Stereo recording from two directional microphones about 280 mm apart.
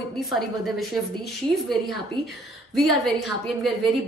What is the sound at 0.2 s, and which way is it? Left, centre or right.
A woman's voice, centre.